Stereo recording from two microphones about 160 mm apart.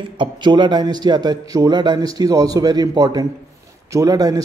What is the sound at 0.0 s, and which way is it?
Speech, 30° right (ahead or behind).